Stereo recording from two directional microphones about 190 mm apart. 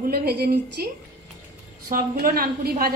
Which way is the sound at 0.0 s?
55° right (ahead or behind).